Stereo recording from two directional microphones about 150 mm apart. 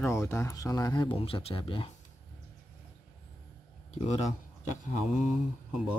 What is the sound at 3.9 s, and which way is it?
Speech, 50° left (ahead or behind).